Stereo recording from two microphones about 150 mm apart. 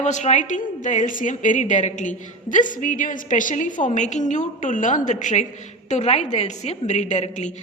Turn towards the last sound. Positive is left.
turn(degrees=50)  # may be behind; listen again after turning